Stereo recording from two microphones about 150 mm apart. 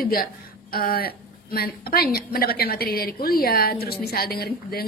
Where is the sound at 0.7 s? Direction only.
80° left.